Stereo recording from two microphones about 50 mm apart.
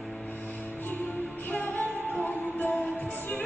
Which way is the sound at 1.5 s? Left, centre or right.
Left.